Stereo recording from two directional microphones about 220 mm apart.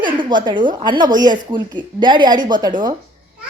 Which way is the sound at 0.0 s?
20° right (ahead or behind).